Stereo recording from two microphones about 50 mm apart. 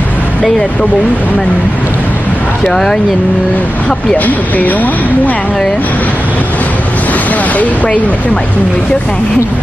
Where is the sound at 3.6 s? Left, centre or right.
Left.